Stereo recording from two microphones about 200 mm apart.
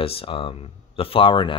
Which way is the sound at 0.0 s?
30° left (ahead or behind).